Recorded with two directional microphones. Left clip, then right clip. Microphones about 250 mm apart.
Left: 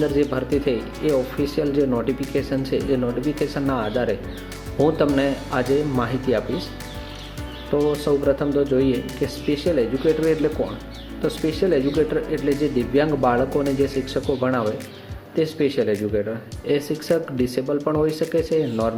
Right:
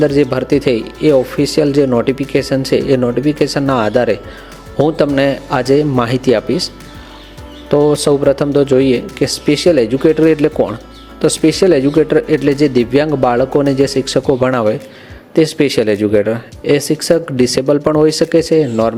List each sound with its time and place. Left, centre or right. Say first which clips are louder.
0.0 s speech: right 9 dB; right
7.7 s speech: right 9 dB; right
11.2 s speech: right 11 dB; right